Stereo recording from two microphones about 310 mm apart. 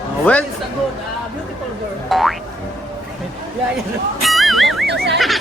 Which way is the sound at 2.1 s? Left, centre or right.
Centre.